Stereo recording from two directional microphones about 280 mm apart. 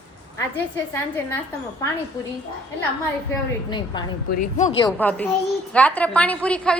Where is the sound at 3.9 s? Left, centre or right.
Centre.